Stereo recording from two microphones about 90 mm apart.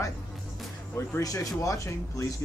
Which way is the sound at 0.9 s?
35° left (ahead or behind).